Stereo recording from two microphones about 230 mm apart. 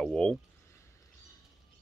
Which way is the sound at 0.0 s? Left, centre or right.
Centre.